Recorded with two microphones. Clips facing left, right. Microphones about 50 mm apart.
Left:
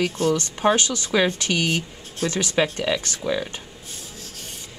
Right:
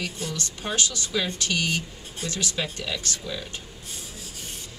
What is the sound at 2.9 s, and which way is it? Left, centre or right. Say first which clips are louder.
Speech: left 8 dB; left.